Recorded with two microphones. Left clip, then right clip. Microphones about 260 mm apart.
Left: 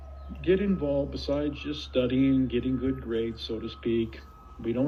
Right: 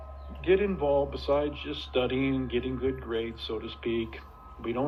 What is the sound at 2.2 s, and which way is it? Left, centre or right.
Speech, left.